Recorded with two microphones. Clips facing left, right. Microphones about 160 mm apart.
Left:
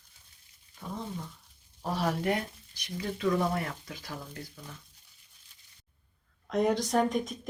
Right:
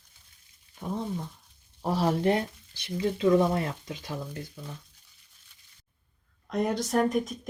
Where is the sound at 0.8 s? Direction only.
25° right (ahead or behind).